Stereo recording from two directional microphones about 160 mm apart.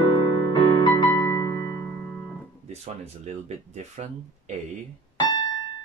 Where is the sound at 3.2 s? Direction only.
45° right (ahead or behind).